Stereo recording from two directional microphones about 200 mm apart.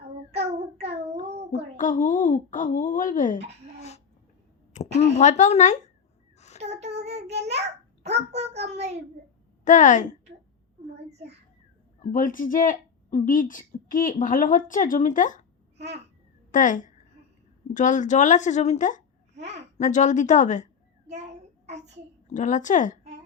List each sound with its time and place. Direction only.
0.3 s child singing: 30° right (ahead or behind)
1.7 s speech: 40° left (ahead or behind)
4.7 s a sound: 35° left (ahead or behind)
5.1 s speech: 35° left (ahead or behind)
6.6 s child singing: 35° right (ahead or behind)
8.0 s a child's voice: 30° right (ahead or behind)
9.6 s speech: 40° left (ahead or behind)
12.1 s speech: 40° left (ahead or behind)
16.5 s a woman's voice: 40° left (ahead or behind)
19.4 s babbling: 35° right (ahead or behind)
19.8 s speech: 40° left (ahead or behind)
22.3 s speech: 40° left (ahead or behind)